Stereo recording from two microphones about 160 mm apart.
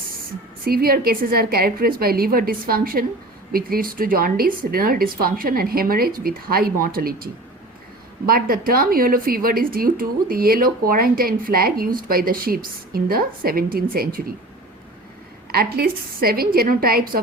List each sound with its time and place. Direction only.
0.6 s a woman's voice: 70° right (ahead or behind)
8.3 s a woman's voice: 65° right (ahead or behind)
15.5 s a woman's voice: 75° right (ahead or behind)